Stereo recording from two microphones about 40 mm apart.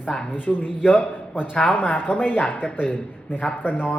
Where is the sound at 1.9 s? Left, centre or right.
Left.